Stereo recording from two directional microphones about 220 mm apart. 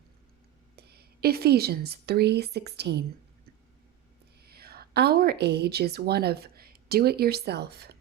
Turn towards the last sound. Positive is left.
turn(degrees=-50)  # may be behind; listen again after turning